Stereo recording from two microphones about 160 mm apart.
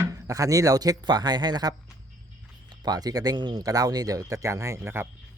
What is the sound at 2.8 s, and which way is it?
Speech, 25° right (ahead or behind).